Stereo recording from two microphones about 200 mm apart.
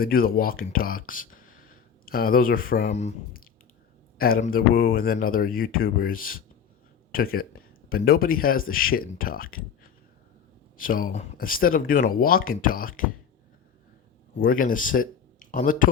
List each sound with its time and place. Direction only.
0.0 s speech: 45° left (ahead or behind)
2.9 s speech: 35° left (ahead or behind)
10.8 s speech: 45° left (ahead or behind)
14.4 s speech: 45° left (ahead or behind)